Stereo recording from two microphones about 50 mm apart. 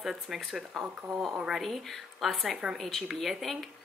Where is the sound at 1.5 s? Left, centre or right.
Centre.